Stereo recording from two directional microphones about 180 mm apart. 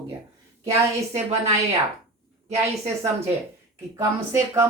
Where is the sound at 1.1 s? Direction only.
35° right (ahead or behind).